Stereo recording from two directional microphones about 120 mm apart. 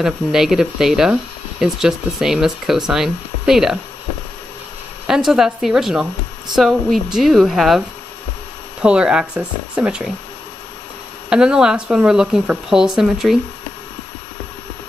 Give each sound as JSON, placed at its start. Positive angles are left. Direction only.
{"t": 0.0, "sound": "speech", "side_deg": -5}
{"t": 5.0, "sound": "speech", "side_deg": -5}
{"t": 8.8, "sound": "speech", "side_deg": -10}
{"t": 11.2, "sound": "speech", "side_deg": -5}